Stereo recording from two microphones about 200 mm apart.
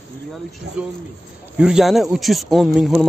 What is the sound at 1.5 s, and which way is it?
Speech, 5° right (ahead or behind).